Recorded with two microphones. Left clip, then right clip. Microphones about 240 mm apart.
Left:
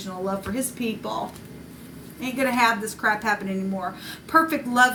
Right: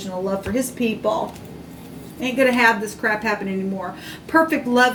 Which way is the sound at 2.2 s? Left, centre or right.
Left.